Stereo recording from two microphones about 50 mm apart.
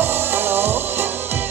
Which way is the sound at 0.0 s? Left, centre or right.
Right.